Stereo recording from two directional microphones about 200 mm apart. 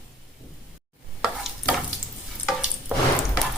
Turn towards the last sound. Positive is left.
turn(degrees=-5)  # may be behind; listen again after turning